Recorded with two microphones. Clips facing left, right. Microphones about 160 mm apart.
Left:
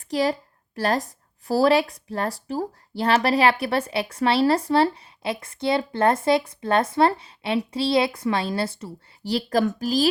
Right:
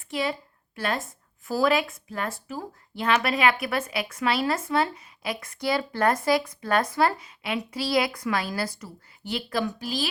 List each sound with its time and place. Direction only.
0.0 s speech: 40° left (ahead or behind)